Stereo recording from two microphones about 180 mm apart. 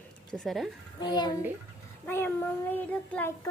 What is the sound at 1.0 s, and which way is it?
Speech, 25° left (ahead or behind).